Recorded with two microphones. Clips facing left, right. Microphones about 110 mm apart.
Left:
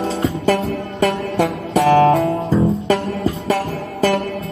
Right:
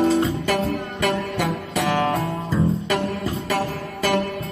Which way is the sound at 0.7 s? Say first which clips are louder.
Left 4 dB; 30° left (ahead or behind).